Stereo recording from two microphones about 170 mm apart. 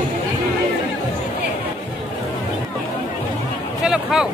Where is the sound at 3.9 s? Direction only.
5° right (ahead or behind).